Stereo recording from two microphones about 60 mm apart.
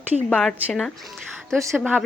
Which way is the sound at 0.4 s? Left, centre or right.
Centre.